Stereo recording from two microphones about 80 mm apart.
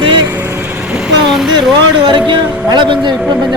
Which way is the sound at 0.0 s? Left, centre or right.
Right.